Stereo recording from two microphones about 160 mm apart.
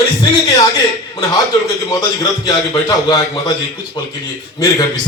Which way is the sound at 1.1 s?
20° left (ahead or behind).